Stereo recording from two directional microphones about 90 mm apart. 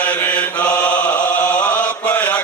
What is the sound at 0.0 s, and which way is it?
Chant, 15° left (ahead or behind).